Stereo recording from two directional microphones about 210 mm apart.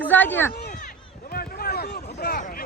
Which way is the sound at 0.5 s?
45° left (ahead or behind).